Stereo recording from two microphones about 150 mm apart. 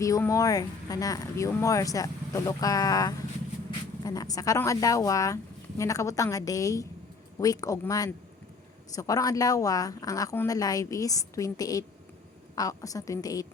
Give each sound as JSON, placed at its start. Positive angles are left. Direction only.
{"t": 0.0, "sound": "speech", "side_deg": 20}